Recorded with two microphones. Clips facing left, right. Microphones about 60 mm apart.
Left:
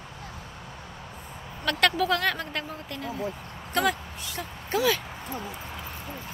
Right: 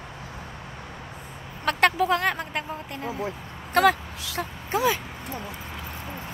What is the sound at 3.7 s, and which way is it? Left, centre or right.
Speech, right.